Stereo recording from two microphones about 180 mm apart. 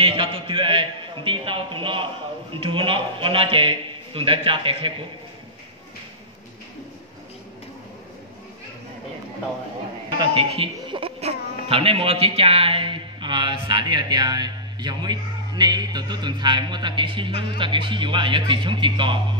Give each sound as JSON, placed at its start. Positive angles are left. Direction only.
{"t": 0.0, "sound": "a man's voice", "side_deg": -30}
{"t": 10.1, "sound": "a woman's voice", "side_deg": -30}